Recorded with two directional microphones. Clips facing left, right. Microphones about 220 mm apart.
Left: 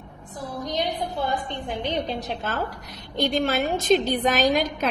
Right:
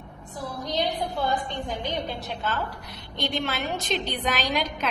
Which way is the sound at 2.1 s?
40° left (ahead or behind).